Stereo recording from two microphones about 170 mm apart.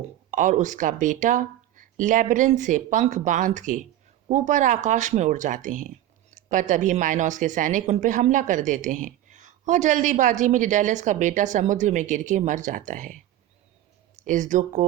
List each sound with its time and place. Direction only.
0.3 s a woman's voice: 50° right (ahead or behind)
14.3 s a woman's voice: 45° right (ahead or behind)